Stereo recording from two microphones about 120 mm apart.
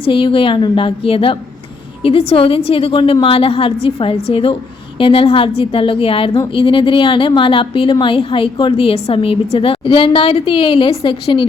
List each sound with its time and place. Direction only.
0.0 s a woman's voice: 45° left (ahead or behind)